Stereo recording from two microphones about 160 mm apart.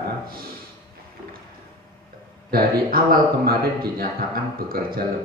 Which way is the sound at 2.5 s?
70° right (ahead or behind).